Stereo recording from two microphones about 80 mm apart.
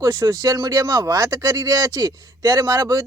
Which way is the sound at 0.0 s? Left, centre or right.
Right.